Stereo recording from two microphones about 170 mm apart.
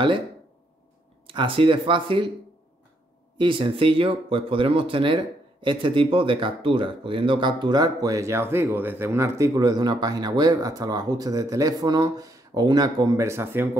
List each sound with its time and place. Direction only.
1.2 s speech: 30° right (ahead or behind)
3.3 s speech: 30° right (ahead or behind); by 13.7 s 15° right (ahead or behind)